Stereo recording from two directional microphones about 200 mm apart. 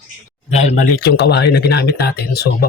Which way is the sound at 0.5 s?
35° left (ahead or behind).